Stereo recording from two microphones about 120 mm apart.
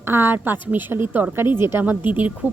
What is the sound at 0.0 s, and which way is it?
Speech, 20° right (ahead or behind).